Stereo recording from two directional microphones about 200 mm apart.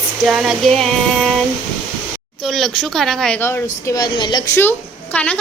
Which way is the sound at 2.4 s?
Centre (ahead or behind).